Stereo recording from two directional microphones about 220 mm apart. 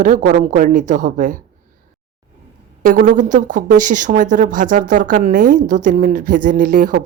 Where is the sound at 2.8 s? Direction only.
35° right (ahead or behind).